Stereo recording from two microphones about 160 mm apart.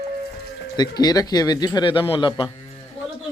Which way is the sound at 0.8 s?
25° left (ahead or behind).